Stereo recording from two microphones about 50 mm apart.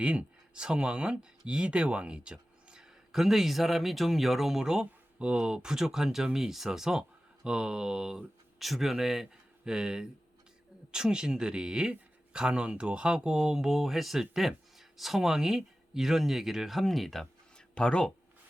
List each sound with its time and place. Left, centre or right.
0.0 s speech: centre
8.5 s speech: centre
17.7 s speech: centre